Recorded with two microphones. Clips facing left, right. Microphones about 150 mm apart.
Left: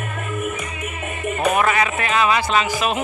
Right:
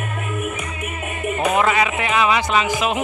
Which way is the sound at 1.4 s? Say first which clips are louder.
Even; 20° right (ahead or behind).